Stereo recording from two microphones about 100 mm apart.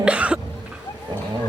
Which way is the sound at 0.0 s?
10° right (ahead or behind).